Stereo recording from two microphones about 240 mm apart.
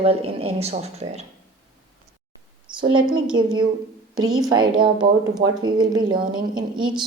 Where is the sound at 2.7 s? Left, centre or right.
Centre.